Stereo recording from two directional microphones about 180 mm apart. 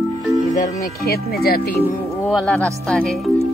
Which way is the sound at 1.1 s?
55° left (ahead or behind).